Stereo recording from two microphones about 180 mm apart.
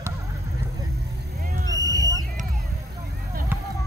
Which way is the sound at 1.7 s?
20° right (ahead or behind).